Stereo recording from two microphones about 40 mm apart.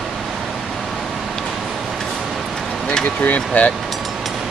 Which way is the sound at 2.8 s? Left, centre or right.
Left.